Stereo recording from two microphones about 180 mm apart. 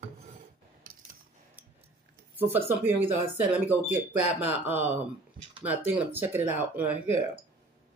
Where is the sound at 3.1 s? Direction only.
10° right (ahead or behind).